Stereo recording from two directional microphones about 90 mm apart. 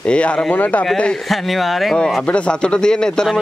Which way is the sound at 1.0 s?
5° left (ahead or behind).